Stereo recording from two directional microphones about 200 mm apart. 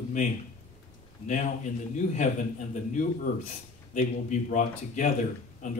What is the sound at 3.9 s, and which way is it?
Speech, 40° left (ahead or behind).